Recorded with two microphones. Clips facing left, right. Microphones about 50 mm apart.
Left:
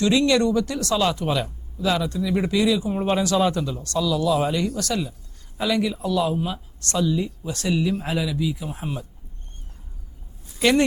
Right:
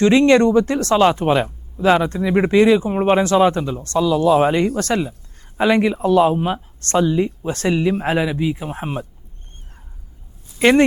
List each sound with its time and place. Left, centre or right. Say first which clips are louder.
0.0 s speech: right 6 dB; right
10.6 s speech: right 6 dB; right